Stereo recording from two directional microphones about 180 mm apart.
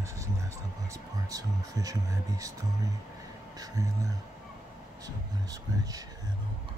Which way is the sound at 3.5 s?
20° right (ahead or behind).